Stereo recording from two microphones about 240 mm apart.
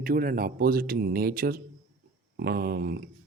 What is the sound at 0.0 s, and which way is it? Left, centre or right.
Speech, right.